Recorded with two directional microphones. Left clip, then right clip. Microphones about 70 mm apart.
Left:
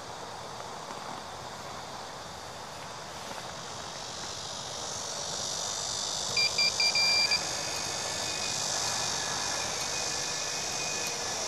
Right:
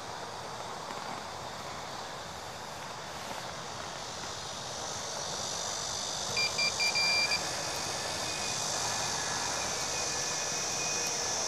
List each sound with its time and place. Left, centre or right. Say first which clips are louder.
5.4 s vehicle: left 1 dB; left